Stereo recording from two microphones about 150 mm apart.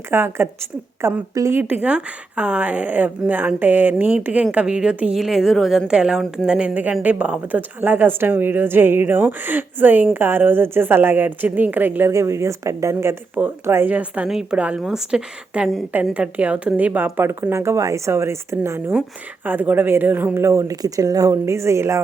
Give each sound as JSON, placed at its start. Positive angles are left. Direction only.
{"t": 0.1, "sound": "a woman's voice", "side_deg": -15}